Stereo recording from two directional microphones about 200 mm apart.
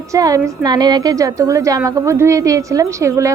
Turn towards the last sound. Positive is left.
turn(degrees=-15)  # may be behind; listen again after turning